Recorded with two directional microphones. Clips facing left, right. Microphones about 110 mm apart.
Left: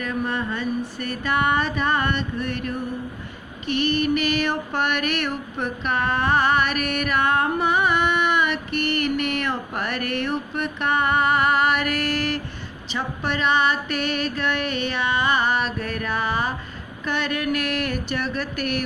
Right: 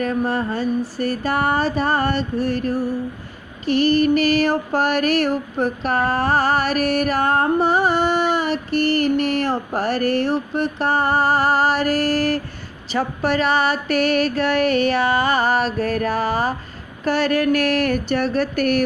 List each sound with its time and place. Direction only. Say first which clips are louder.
0.0 s child singing: right 5 dB; 40° right (ahead or behind)